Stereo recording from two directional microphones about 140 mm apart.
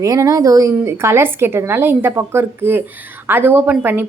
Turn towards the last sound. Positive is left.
turn(degrees=-15)  # may be behind; listen again after turning